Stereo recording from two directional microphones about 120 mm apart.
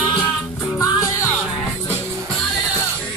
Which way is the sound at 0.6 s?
25° left (ahead or behind).